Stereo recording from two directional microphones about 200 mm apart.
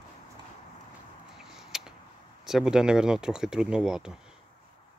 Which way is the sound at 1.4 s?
Centre (ahead or behind).